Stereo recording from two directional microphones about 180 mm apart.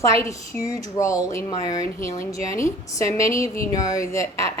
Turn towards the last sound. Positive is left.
turn(degrees=15)  # may be behind; listen again after turning